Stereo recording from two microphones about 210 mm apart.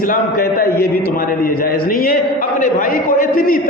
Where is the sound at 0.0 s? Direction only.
40° left (ahead or behind).